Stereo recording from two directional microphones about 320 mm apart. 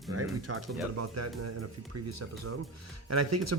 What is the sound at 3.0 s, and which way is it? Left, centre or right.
Speech, right.